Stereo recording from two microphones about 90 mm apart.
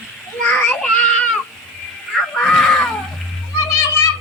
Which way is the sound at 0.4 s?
10° left (ahead or behind).